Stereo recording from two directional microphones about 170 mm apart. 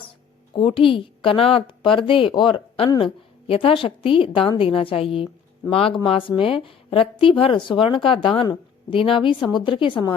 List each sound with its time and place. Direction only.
0.5 s a woman's voice: 30° left (ahead or behind)